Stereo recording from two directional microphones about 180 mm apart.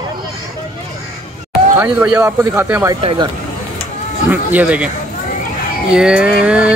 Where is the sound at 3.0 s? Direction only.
25° right (ahead or behind).